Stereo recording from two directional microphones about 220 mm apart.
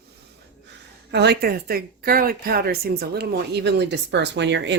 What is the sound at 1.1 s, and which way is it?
Speech, 50° right (ahead or behind).